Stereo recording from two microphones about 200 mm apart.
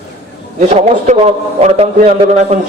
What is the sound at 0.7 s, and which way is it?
Speech, 35° right (ahead or behind).